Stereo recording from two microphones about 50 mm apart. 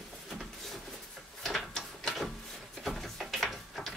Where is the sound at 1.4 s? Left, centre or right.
Centre.